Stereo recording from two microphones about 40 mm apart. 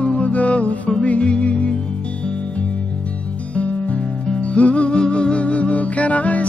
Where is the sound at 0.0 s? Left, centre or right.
Left.